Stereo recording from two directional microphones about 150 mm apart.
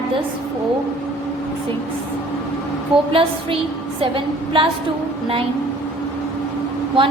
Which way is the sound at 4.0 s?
35° right (ahead or behind).